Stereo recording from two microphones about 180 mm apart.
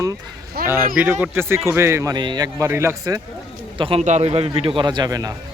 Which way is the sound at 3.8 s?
35° right (ahead or behind).